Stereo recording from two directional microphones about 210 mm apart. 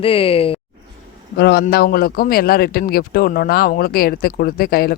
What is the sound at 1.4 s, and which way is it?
Speech, 50° left (ahead or behind).